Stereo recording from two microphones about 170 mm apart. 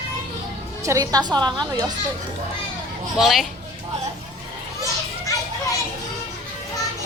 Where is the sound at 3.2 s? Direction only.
Centre (ahead or behind).